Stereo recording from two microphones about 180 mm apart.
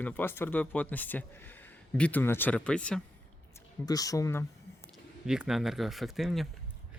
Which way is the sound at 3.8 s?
20° left (ahead or behind).